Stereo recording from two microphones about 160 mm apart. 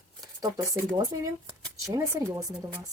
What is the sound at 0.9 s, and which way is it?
Speech, 25° right (ahead or behind).